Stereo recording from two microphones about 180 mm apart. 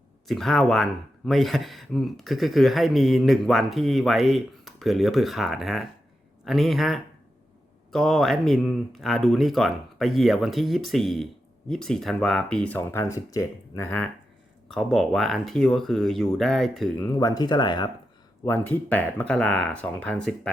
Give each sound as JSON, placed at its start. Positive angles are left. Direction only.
{"t": 0.3, "sound": "speech", "side_deg": 0}
{"t": 14.7, "sound": "speech", "side_deg": 0}
{"t": 17.0, "sound": "speech", "side_deg": 20}
{"t": 18.4, "sound": "speech", "side_deg": 10}